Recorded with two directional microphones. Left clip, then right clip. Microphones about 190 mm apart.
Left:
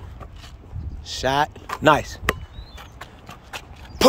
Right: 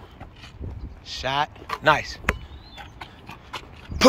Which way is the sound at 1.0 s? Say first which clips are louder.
Left 4 dB; 45° left (ahead or behind).